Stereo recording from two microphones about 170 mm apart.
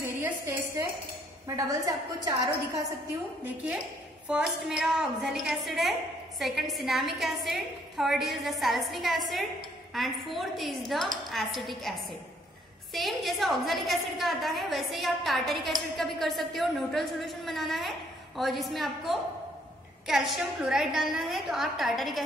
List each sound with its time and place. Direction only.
1.7 s a woman's voice: 20° right (ahead or behind)
3.4 s a woman's voice: 5° right (ahead or behind)